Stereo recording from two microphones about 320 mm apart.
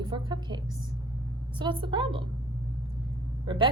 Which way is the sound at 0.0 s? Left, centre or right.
Centre.